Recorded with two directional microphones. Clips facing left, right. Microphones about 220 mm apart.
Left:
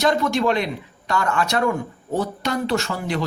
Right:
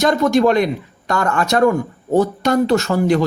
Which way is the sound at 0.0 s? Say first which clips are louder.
Right 6 dB; 45° right (ahead or behind).